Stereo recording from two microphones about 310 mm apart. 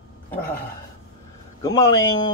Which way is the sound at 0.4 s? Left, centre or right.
Left.